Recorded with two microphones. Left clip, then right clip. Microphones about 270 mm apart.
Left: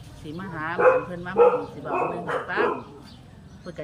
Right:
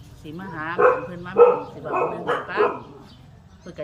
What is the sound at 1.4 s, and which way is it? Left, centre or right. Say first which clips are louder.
Speech: right 3 dB; right.